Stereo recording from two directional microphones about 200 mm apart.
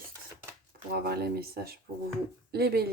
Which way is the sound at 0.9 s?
50° right (ahead or behind).